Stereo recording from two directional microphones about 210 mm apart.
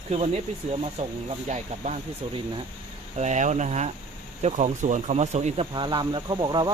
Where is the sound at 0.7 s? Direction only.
30° right (ahead or behind).